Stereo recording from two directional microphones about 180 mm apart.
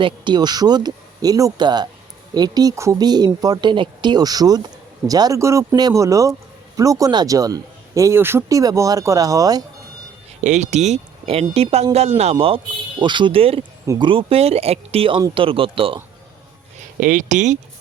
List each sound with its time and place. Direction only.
0.0 s a man's voice: 25° right (ahead or behind)
10.4 s a man's voice: 40° right (ahead or behind)
17.0 s speech: 45° right (ahead or behind)